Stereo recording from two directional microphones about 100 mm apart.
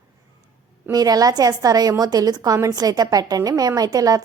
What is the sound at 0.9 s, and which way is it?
A woman's voice, 40° right (ahead or behind).